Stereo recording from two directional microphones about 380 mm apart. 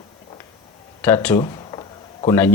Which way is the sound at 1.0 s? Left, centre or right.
Centre.